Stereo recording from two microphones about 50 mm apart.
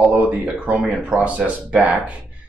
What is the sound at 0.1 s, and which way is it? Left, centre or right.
Speech, right.